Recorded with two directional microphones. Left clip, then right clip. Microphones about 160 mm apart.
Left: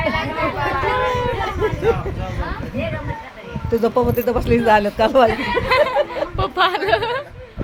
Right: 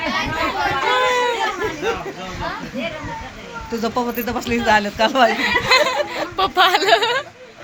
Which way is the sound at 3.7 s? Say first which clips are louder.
Left 5 dB; 50° left (ahead or behind).